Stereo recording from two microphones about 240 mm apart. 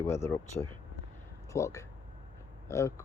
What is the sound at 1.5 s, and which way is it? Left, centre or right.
Speech, centre.